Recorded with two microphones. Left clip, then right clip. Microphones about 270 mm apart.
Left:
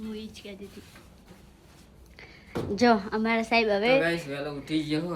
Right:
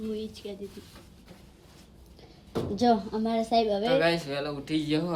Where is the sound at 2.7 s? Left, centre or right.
Centre.